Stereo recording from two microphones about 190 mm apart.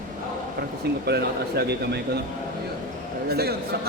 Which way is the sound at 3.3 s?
55° right (ahead or behind).